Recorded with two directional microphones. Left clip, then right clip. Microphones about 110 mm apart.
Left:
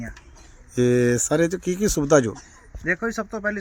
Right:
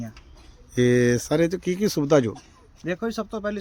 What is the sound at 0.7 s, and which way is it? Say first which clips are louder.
Speech: even; 15° right (ahead or behind).